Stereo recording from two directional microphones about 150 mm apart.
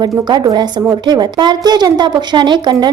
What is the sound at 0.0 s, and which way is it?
A woman's voice, 25° right (ahead or behind).